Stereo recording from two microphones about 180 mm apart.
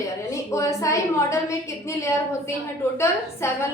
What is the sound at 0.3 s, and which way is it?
A woman's voice, 15° left (ahead or behind).